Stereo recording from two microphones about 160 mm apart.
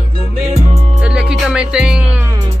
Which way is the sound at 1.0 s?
5° right (ahead or behind).